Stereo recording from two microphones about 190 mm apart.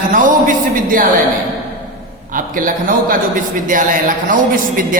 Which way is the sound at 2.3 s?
45° right (ahead or behind).